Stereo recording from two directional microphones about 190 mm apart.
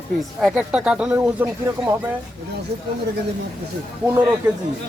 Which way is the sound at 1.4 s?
15° right (ahead or behind).